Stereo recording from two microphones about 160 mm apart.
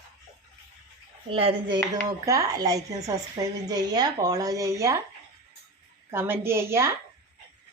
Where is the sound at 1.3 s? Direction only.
35° right (ahead or behind).